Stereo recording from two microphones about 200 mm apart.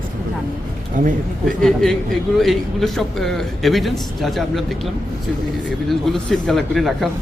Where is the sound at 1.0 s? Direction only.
40° right (ahead or behind).